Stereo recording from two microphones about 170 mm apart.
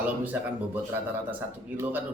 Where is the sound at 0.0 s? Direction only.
10° right (ahead or behind).